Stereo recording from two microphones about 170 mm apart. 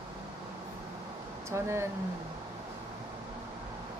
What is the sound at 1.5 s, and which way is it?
Speech, 15° right (ahead or behind).